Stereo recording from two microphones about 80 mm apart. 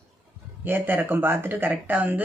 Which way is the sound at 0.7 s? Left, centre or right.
Right.